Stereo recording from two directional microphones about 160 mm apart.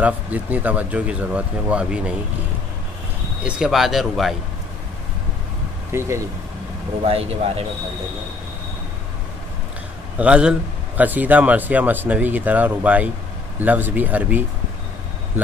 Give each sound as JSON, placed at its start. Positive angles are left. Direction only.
{"t": 0.0, "sound": "speech", "side_deg": -10}
{"t": 3.4, "sound": "speech", "side_deg": -5}
{"t": 5.9, "sound": "speech", "side_deg": -15}
{"t": 7.1, "sound": "speech", "side_deg": -40}
{"t": 10.1, "sound": "speech", "side_deg": -5}